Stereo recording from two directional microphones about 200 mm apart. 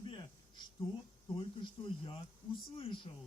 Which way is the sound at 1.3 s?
25° left (ahead or behind).